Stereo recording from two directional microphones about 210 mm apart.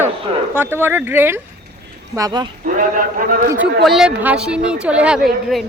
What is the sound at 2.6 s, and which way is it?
Speech, 40° right (ahead or behind).